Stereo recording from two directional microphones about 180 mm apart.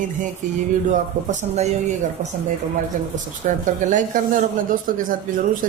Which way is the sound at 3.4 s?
45° right (ahead or behind).